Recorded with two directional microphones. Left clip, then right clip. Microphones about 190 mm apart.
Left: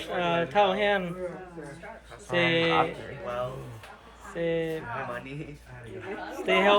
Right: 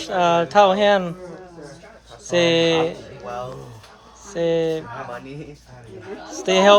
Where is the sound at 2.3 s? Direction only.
10° right (ahead or behind).